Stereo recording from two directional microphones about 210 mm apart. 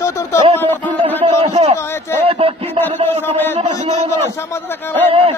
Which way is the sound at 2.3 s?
25° right (ahead or behind).